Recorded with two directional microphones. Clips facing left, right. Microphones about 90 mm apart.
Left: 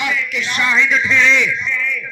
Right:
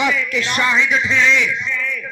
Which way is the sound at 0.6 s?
20° right (ahead or behind).